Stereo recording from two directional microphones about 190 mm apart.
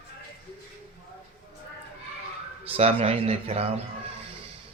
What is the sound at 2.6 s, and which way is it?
Speech, 30° right (ahead or behind).